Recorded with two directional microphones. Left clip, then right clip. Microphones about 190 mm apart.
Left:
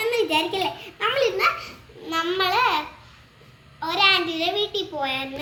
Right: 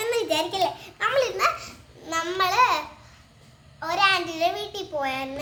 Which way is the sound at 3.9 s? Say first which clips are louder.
Left 2 dB; 50° right (ahead or behind).